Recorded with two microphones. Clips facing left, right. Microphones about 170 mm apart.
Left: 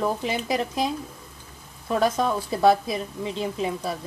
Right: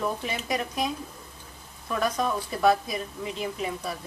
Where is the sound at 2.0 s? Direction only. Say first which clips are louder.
Left 3 dB; 30° left (ahead or behind).